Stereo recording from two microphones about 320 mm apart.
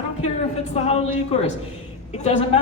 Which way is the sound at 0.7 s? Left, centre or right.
Centre.